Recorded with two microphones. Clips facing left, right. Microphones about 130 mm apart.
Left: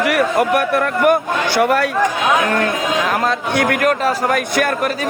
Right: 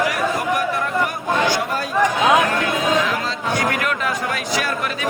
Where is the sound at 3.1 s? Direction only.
55° left (ahead or behind).